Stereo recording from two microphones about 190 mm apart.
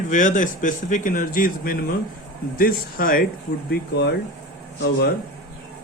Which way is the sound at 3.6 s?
60° left (ahead or behind).